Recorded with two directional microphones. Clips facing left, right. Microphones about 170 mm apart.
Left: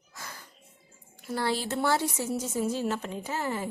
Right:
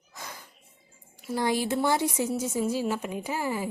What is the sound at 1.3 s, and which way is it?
Speech, 15° right (ahead or behind).